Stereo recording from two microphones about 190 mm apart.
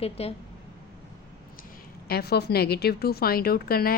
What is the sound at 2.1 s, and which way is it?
A woman's voice, 55° left (ahead or behind).